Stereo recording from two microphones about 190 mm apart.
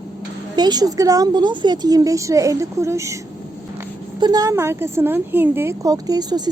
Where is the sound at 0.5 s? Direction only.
20° right (ahead or behind).